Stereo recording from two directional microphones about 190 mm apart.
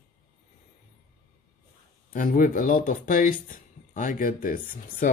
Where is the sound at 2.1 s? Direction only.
45° left (ahead or behind).